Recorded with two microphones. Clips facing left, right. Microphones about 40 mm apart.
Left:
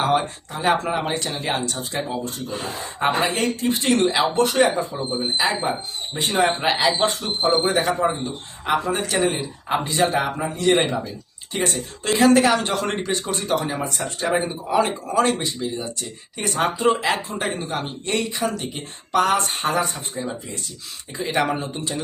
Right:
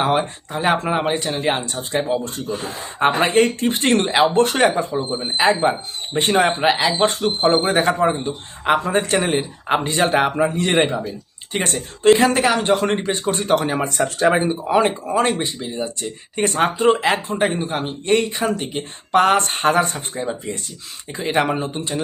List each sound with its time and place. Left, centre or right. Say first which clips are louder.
0.6 s speech: right 2 dB; right
3.2 s speech: right 5 dB; right
6.6 s speech: right 2 dB; centre
7.0 s speech: right 4 dB; right
11.5 s speech: right 1 dB; right
12.1 s speech: left 6 dB; centre
13.3 s speech: right 6 dB; right
14.4 s speech: right 4 dB; right
17.2 s speech: right 6 dB; right
18.8 s speech: right 4 dB; right
21.2 s speech: right 3 dB; right